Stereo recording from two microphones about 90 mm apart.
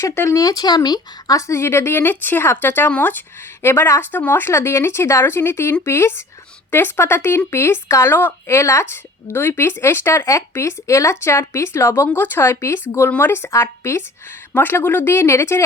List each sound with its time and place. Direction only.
0.0 s speech: 30° left (ahead or behind)